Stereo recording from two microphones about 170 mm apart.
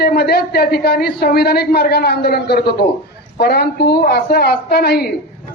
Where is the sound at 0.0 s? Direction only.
70° left (ahead or behind).